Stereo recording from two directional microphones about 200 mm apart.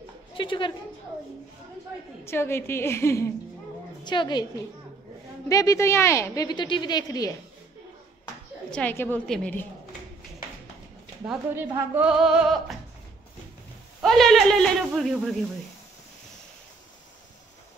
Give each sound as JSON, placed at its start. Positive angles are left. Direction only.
{"t": 0.4, "sound": "a woman's voice", "side_deg": 25}
{"t": 2.2, "sound": "a woman's voice", "side_deg": 10}
{"t": 5.5, "sound": "speech", "side_deg": 15}
{"t": 8.6, "sound": "speech", "side_deg": 5}
{"t": 11.2, "sound": "speech", "side_deg": -10}
{"t": 14.0, "sound": "speech", "side_deg": 0}